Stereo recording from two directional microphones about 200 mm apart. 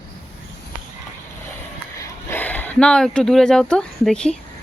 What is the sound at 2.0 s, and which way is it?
Speech, 10° left (ahead or behind).